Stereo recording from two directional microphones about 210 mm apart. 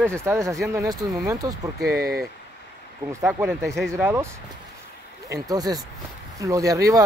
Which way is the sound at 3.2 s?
5° right (ahead or behind).